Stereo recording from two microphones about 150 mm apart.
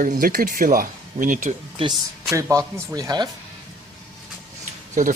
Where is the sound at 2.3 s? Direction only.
20° right (ahead or behind).